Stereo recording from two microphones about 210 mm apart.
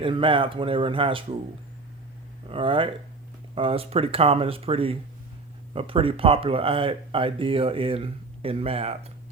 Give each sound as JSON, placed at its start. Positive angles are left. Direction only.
{"t": 0.0, "sound": "speech", "side_deg": -25}
{"t": 2.5, "sound": "speech", "side_deg": -25}